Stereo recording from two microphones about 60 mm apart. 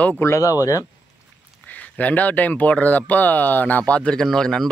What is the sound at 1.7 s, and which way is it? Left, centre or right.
Speech, left.